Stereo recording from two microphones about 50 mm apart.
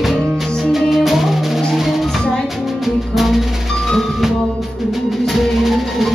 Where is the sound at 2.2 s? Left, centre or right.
Centre.